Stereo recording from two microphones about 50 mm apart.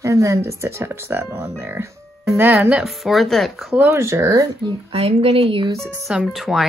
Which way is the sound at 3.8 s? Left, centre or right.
Right.